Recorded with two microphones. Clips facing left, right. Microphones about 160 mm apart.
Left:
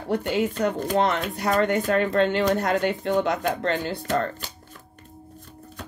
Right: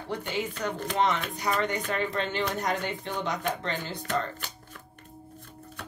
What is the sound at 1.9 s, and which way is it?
Speech, 60° left (ahead or behind).